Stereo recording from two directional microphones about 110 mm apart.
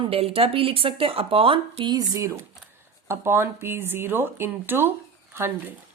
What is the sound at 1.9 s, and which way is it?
Speech, 30° right (ahead or behind).